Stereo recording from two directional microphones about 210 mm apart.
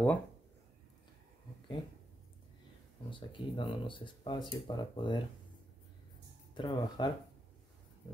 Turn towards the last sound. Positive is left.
turn(degrees=20)  # may be behind; listen again after turning